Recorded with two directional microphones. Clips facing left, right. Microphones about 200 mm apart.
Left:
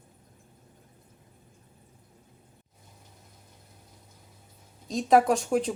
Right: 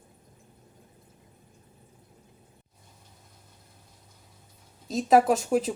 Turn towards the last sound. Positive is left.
turn(degrees=-5)  # may be behind; listen again after turning